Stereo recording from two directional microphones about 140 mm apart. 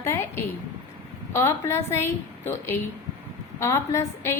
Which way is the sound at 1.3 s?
20° left (ahead or behind).